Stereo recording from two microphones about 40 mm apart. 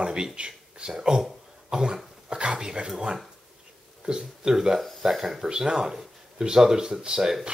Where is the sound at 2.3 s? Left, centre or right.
Right.